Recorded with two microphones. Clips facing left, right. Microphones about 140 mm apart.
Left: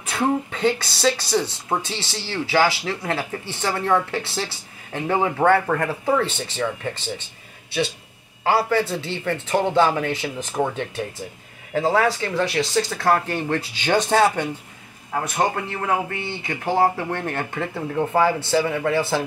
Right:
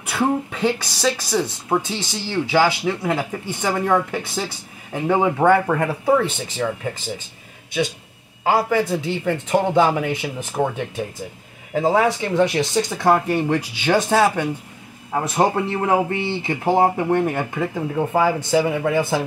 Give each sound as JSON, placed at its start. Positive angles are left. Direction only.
{"t": 0.0, "sound": "speech", "side_deg": -10}
{"t": 3.2, "sound": "speech", "side_deg": -15}
{"t": 8.5, "sound": "speech", "side_deg": -10}
{"t": 15.1, "sound": "speech", "side_deg": -25}